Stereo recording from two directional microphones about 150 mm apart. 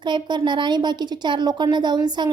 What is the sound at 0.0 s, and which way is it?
A child's voice, 30° right (ahead or behind).